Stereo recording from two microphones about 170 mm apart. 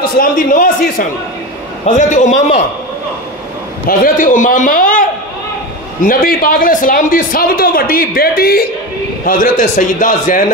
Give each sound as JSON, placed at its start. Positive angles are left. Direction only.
{"t": 0.2, "sound": "a man's voice", "side_deg": 55}
{"t": 3.8, "sound": "a man's voice", "side_deg": 55}
{"t": 6.0, "sound": "a man's voice", "side_deg": 60}
{"t": 9.2, "sound": "a man's voice", "side_deg": 50}